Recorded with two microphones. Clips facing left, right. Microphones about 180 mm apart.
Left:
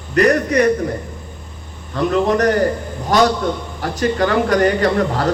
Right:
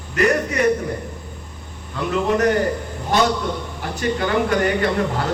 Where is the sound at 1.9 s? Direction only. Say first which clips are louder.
Left 4 dB; 35° left (ahead or behind).